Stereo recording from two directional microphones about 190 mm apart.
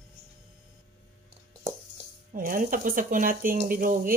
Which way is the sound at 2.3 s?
45° right (ahead or behind).